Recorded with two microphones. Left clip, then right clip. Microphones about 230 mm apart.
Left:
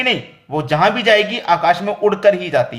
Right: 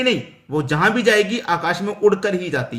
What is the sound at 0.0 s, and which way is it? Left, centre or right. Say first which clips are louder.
A man's voice: left 2 dB; centre.